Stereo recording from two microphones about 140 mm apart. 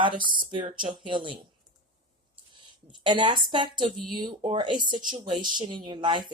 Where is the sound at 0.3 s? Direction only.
35° right (ahead or behind).